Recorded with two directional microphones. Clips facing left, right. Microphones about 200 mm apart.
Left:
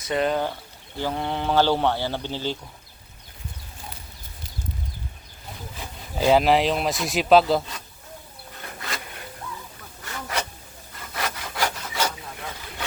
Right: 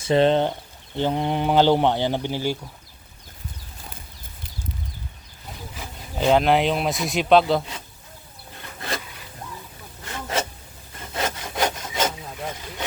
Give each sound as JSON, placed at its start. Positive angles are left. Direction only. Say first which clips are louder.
{"t": 0.0, "sound": "speech", "louder": "right 6 dB", "side_deg": -30}
{"t": 6.1, "sound": "speech", "louder": "even", "side_deg": 5}
{"t": 10.0, "sound": "rub", "louder": "right 3 dB", "side_deg": -25}
{"t": 11.1, "sound": "wood", "louder": "right 3 dB", "side_deg": -25}